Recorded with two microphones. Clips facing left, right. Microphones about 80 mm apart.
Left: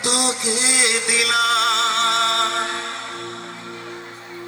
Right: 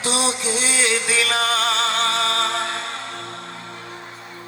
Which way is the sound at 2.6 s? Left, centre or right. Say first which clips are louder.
Left 1 dB; centre.